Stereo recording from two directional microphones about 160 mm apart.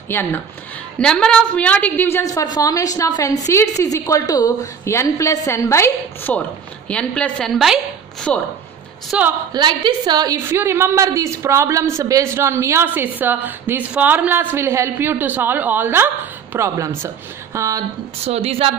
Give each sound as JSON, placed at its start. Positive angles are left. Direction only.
{"t": 0.1, "sound": "a woman's voice", "side_deg": 10}
{"t": 9.5, "sound": "a woman's voice", "side_deg": -30}
{"t": 18.2, "sound": "speech", "side_deg": -40}